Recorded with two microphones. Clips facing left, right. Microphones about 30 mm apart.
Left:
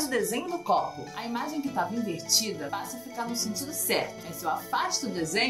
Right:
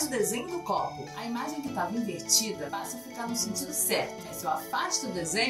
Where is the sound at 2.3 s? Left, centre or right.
Centre.